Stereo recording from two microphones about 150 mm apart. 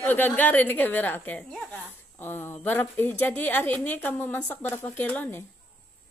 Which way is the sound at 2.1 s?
15° left (ahead or behind).